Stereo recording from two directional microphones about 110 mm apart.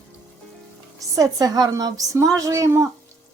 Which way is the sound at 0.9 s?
35° right (ahead or behind).